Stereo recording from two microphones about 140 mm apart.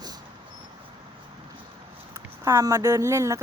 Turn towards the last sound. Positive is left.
turn(degrees=-20)  # may be behind; listen again after turning